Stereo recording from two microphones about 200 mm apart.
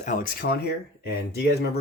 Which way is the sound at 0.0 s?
40° left (ahead or behind).